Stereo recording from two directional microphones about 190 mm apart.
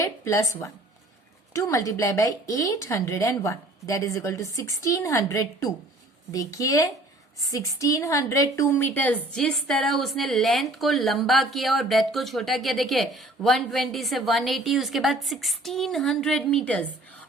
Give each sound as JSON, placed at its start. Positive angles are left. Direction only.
{"t": 0.0, "sound": "a woman's voice", "side_deg": 15}